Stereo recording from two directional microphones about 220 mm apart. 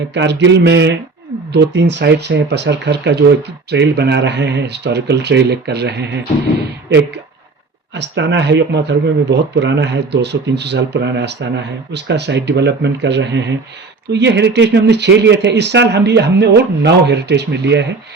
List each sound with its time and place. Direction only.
0.1 s speech: 50° right (ahead or behind)
7.9 s speech: 50° right (ahead or behind)